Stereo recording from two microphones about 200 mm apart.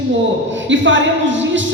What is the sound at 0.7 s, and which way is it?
Music, 70° right (ahead or behind).